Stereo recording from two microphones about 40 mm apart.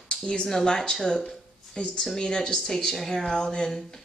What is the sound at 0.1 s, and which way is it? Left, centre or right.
Speech, left.